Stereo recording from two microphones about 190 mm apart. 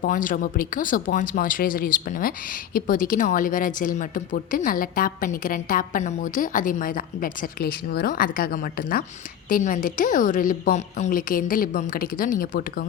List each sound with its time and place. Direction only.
0.0 s speech: 45° left (ahead or behind)